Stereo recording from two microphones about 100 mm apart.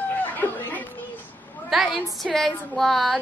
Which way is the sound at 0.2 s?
20° left (ahead or behind).